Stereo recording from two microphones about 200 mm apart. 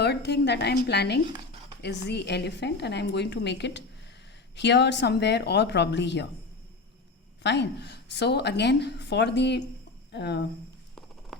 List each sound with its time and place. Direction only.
0.0 s a woman's voice: 55° left (ahead or behind)
7.4 s a woman's voice: 60° left (ahead or behind)